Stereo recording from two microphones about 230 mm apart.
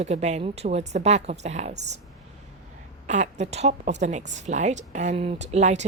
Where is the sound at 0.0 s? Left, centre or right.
Right.